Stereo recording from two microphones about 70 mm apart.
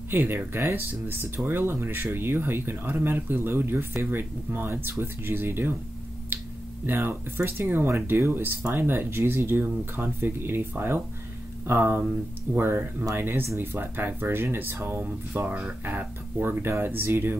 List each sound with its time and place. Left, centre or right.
0.1 s speech: right
6.9 s speech: right